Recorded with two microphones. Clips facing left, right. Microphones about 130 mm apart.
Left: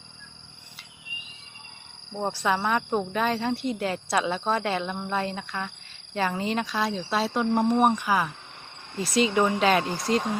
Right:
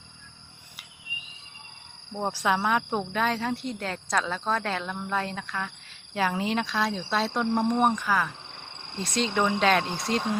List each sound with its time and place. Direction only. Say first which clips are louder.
2.1 s speech: even; 5° right (ahead or behind)